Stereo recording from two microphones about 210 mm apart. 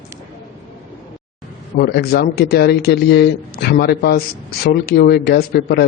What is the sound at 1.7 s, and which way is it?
A man's voice, 50° left (ahead or behind).